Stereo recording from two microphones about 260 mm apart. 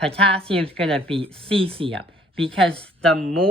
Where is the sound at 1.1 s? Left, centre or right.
Right.